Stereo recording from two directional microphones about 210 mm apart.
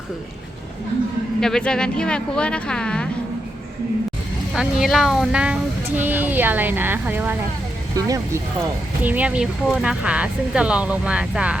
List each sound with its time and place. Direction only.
1.4 s speech: 5° left (ahead or behind)
4.5 s speech: centre (ahead or behind)